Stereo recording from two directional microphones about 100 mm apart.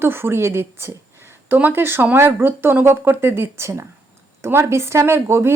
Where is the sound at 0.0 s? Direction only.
25° right (ahead or behind).